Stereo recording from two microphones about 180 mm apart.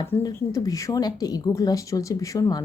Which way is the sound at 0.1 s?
20° left (ahead or behind).